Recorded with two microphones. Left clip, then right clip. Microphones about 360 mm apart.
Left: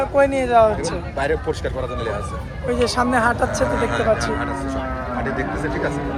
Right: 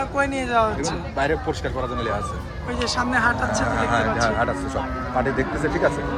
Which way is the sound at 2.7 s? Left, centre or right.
Centre.